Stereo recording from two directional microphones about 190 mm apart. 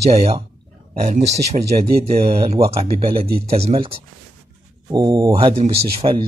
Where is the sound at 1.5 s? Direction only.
35° right (ahead or behind).